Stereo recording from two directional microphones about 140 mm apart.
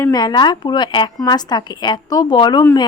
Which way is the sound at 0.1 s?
30° left (ahead or behind).